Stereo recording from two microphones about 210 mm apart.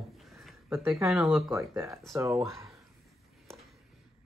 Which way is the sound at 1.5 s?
15° right (ahead or behind).